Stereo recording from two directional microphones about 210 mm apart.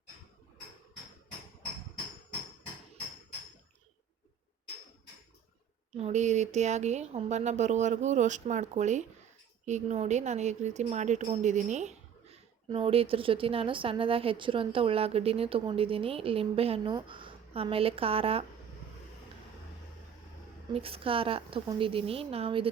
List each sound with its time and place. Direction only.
6.0 s a woman's voice: 35° right (ahead or behind)
20.7 s a woman's voice: 25° right (ahead or behind)